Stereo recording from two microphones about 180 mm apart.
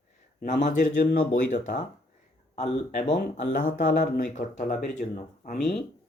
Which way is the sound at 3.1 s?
50° left (ahead or behind).